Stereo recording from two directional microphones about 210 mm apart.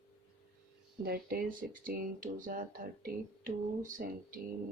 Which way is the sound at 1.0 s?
45° right (ahead or behind).